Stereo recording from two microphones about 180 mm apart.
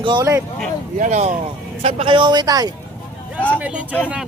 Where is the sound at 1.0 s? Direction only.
40° right (ahead or behind).